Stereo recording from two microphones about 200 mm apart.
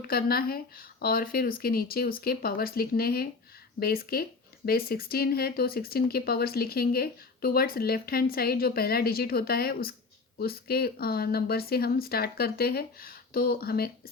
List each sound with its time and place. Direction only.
0.0 s speech: 50° left (ahead or behind)